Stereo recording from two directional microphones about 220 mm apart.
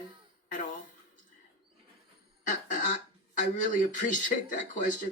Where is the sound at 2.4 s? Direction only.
35° left (ahead or behind).